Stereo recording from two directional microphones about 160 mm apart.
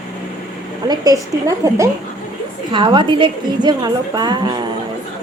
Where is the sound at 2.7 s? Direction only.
30° right (ahead or behind).